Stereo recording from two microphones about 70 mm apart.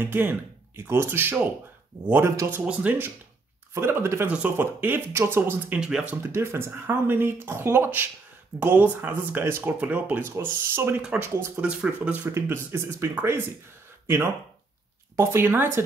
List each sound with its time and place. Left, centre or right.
0.0 s speech: right
2.6 s speech: centre
3.7 s speech: right
4.3 s speech: right
5.8 s speech: centre
6.2 s speech: right
9.3 s speech: right
9.7 s speech: right
10.3 s speech: right
11.6 s speech: centre
12.3 s speech: right